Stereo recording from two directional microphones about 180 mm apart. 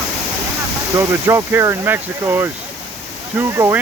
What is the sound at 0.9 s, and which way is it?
Speech, 15° right (ahead or behind).